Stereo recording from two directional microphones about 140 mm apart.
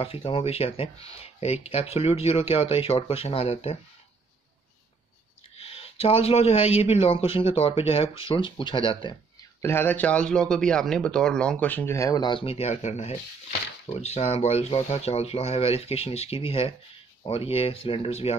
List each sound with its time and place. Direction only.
0.0 s speech: 40° left (ahead or behind)
5.6 s speech: 40° left (ahead or behind)
9.6 s speech: 15° left (ahead or behind); by 18.3 s 45° left (ahead or behind)